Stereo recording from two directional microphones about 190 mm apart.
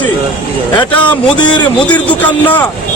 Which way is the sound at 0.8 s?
25° left (ahead or behind).